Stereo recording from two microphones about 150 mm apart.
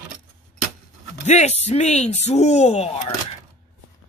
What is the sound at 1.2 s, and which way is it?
Speech, 50° left (ahead or behind).